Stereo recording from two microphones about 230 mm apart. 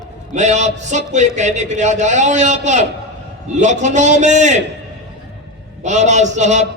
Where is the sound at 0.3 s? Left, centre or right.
Right.